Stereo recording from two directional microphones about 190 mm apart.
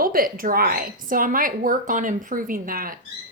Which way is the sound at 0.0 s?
50° right (ahead or behind).